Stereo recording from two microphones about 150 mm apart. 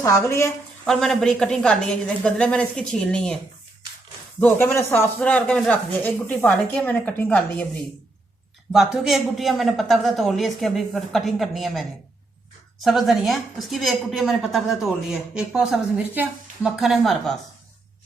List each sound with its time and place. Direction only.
0.0 s a woman's voice: 20° left (ahead or behind)
0.9 s a woman's voice: 5° left (ahead or behind)
4.4 s speech: 15° left (ahead or behind)
8.7 s a woman's voice: centre (ahead or behind)